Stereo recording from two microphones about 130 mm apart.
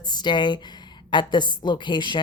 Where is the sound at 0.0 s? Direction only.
35° left (ahead or behind).